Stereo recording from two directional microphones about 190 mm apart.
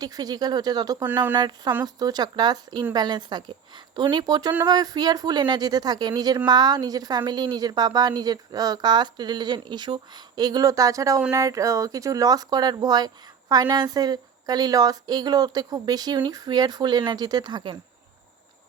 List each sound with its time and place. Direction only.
0.0 s a woman's voice: 20° right (ahead or behind)
1.4 s a woman's voice: 20° right (ahead or behind)